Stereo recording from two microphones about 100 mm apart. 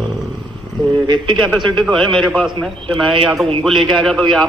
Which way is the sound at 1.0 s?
50° right (ahead or behind).